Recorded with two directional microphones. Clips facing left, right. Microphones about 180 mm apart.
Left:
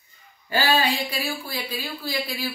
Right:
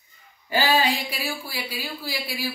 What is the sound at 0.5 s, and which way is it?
Speech, 15° right (ahead or behind).